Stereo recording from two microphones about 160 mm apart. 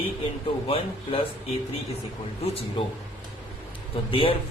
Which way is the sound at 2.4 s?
40° left (ahead or behind).